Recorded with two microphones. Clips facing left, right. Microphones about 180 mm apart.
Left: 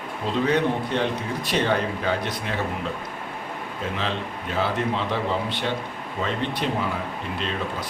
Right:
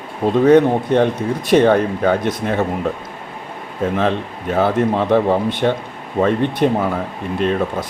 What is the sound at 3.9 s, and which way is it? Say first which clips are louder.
A man's voice: right 9 dB; 55° right (ahead or behind).